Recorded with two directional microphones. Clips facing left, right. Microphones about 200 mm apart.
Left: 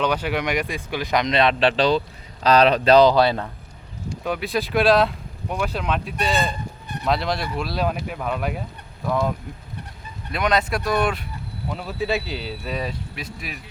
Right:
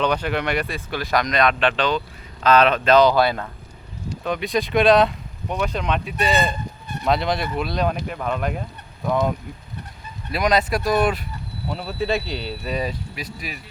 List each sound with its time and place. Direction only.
0.0 s a man's voice: 10° left (ahead or behind); by 3.5 s 25° left (ahead or behind)
4.1 s speech: 10° left (ahead or behind)
10.3 s speech: 5° right (ahead or behind)